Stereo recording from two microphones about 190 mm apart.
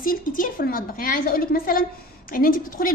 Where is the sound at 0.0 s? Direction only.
45° left (ahead or behind).